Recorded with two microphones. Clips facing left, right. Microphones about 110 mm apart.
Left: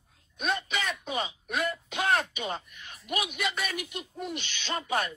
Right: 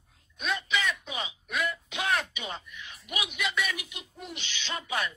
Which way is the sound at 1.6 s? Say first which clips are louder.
Left 2 dB; 40° left (ahead or behind).